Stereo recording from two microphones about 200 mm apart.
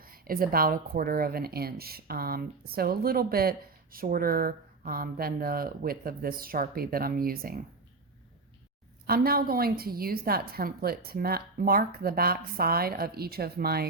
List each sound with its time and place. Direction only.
0.0 s a woman's voice: 45° right (ahead or behind)
9.0 s a woman's voice: 50° right (ahead or behind)